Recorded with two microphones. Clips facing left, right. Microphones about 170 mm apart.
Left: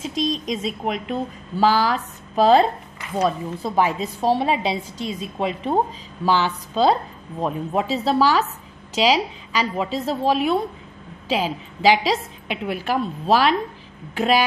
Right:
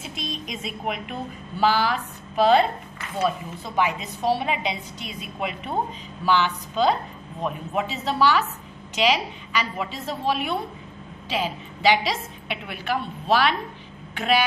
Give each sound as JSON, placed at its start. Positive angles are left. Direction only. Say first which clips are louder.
{"t": 0.3, "sound": "a woman's voice", "louder": "left 8 dB", "side_deg": 35}